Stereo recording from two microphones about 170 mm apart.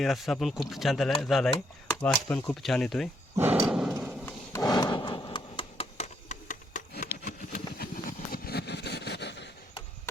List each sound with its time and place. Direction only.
0.0 s speech: centre (ahead or behind)
3.3 s dog: 10° right (ahead or behind)
3.7 s horse: 5° right (ahead or behind)
3.9 s clip-clop: 10° right (ahead or behind)
4.3 s a sound: 20° left (ahead or behind); by 6.8 s 45° left (ahead or behind)
7.2 s vehicle: 55° left (ahead or behind); by 9.5 s 90° left